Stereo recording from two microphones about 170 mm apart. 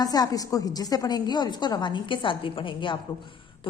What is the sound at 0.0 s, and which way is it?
A woman's voice, 20° left (ahead or behind).